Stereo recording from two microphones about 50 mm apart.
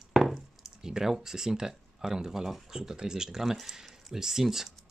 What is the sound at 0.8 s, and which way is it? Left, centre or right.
Speech, centre.